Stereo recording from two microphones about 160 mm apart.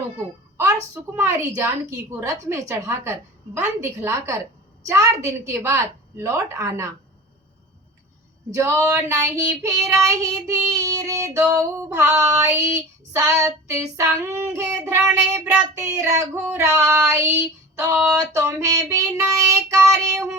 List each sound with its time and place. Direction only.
0.5 s female singing: 15° right (ahead or behind)
4.9 s a woman's voice: 20° right (ahead or behind)
8.5 s a woman's voice: 20° right (ahead or behind)
10.8 s female singing: 20° right (ahead or behind)